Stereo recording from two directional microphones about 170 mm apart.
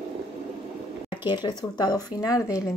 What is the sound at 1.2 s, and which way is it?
Speech, 25° left (ahead or behind).